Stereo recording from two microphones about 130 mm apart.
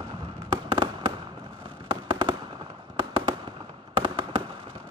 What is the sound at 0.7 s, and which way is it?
Fireworks, 40° right (ahead or behind).